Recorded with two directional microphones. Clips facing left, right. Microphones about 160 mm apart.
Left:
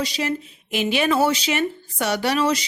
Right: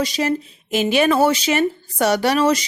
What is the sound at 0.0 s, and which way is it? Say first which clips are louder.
Speech: right 4 dB; 45° right (ahead or behind).